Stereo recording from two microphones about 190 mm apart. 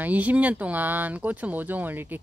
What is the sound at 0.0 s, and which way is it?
Speech, 10° right (ahead or behind).